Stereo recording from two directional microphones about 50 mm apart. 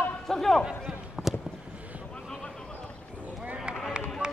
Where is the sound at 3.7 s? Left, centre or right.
Centre.